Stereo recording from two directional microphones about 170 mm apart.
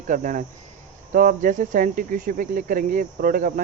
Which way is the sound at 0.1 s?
50° right (ahead or behind).